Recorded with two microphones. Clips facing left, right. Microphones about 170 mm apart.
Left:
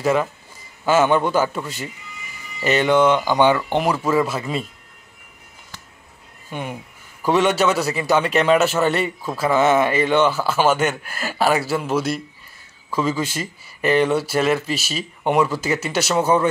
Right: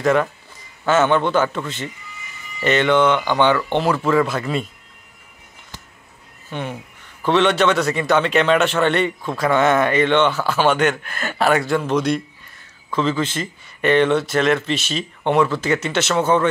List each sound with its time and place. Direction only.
0.0 s a man's voice: 5° left (ahead or behind)
6.5 s a man's voice: 10° left (ahead or behind)